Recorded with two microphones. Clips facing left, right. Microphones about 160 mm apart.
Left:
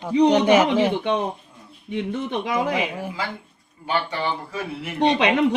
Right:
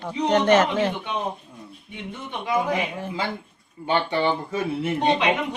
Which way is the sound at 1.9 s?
90° left.